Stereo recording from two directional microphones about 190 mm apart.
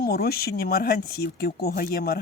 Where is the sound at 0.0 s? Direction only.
55° left (ahead or behind).